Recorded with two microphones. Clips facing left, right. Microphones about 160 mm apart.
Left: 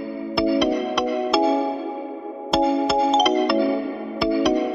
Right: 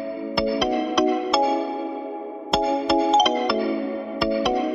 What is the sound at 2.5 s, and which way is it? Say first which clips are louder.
Music: left 2 dB; centre (ahead or behind).